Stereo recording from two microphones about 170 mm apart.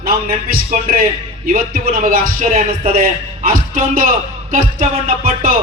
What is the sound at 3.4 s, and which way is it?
A man's voice, 55° right (ahead or behind).